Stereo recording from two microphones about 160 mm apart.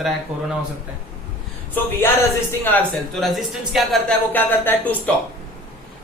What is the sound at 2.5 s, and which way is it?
Speech, 10° left (ahead or behind).